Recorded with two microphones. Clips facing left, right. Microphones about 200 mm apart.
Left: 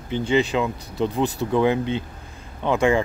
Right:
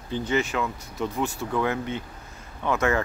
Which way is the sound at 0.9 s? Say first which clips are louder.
Left 6 dB; 35° left (ahead or behind).